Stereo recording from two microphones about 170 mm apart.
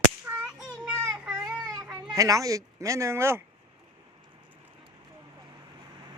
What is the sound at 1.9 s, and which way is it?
Speech, 20° right (ahead or behind).